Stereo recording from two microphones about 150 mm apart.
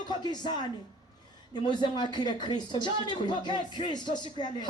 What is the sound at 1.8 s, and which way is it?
A man's voice, 30° left (ahead or behind).